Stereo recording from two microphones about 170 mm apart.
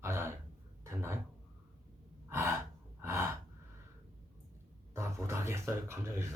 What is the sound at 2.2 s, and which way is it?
Gasp, 15° right (ahead or behind).